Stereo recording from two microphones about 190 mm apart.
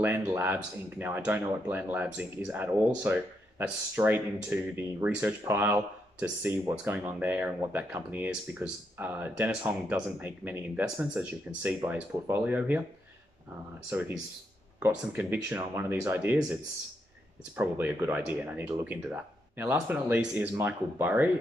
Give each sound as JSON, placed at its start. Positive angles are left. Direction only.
{"t": 0.0, "sound": "speech", "side_deg": -10}
{"t": 13.8, "sound": "speech", "side_deg": -10}
{"t": 17.6, "sound": "speech", "side_deg": -10}